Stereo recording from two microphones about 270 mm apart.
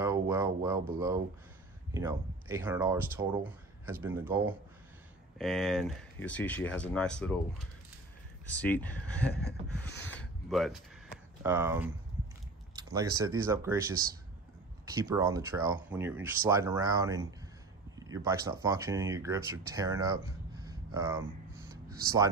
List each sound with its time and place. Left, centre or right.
0.0 s speech: centre
9.7 s a sound: centre
11.4 s speech: centre